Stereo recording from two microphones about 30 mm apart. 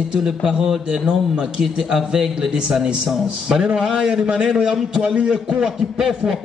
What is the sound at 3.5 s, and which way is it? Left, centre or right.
A man's voice, right.